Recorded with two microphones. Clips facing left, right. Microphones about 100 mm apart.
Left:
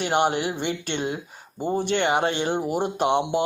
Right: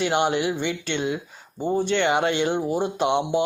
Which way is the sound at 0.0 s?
45° left (ahead or behind).